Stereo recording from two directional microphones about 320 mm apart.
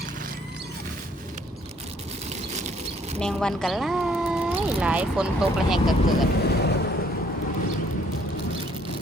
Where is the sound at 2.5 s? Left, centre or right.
Right.